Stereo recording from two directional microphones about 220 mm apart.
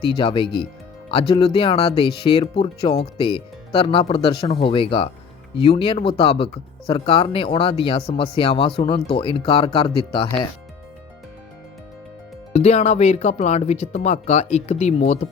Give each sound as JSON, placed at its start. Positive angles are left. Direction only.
{"t": 0.1, "sound": "speech", "side_deg": 25}
{"t": 12.5, "sound": "speech", "side_deg": 30}